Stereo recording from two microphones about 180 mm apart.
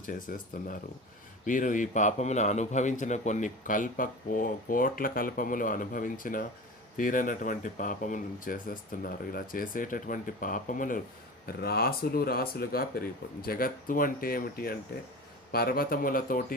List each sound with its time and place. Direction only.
0.0 s a man's voice: 50° left (ahead or behind)
11.4 s a man's voice: 60° left (ahead or behind)